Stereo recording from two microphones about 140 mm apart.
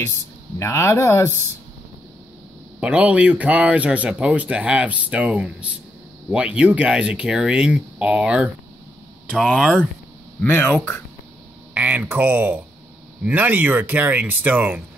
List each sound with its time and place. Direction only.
0.6 s speech: 20° left (ahead or behind)
2.8 s speech: 10° right (ahead or behind)
9.3 s speech: 5° left (ahead or behind)
11.7 s speech: 10° right (ahead or behind)